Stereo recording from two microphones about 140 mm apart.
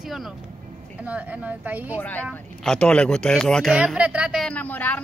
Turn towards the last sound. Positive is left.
turn(degrees=10)  # may be behind; listen again after turning